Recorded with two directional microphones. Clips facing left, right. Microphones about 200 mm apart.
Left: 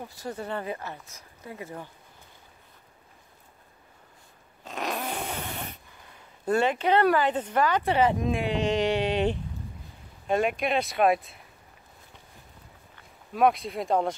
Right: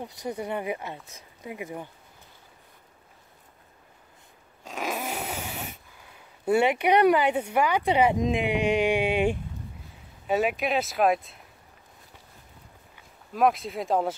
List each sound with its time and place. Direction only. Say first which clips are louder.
0.0 s speech: right 3 dB; 15° right (ahead or behind)
4.6 s dog: even; 5° right (ahead or behind)
6.4 s speech: right 2 dB; 10° right (ahead or behind)
13.3 s speech: even; centre (ahead or behind)